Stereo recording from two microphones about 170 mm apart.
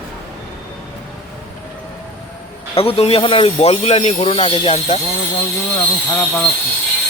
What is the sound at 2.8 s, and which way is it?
Speech, 35° left (ahead or behind).